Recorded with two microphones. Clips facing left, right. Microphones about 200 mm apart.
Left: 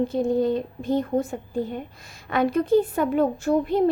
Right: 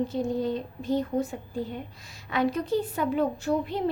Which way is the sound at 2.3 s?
50° left (ahead or behind).